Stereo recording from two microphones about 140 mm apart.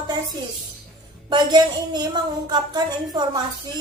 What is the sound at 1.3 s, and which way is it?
A woman's voice, 30° right (ahead or behind).